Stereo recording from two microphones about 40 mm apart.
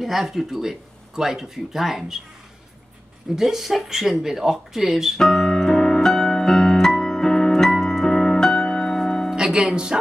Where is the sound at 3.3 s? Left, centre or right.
Centre.